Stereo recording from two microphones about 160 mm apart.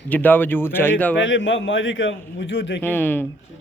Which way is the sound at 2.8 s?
15° left (ahead or behind).